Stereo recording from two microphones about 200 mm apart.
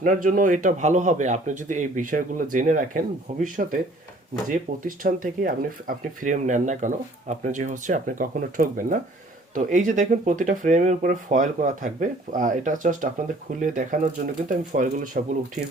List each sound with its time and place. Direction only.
0.0 s speech: 40° right (ahead or behind)